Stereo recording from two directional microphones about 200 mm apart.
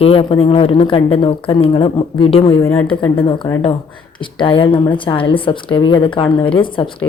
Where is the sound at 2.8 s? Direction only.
25° left (ahead or behind).